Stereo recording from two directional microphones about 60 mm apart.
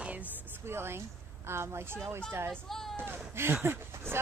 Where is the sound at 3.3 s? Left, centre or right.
Right.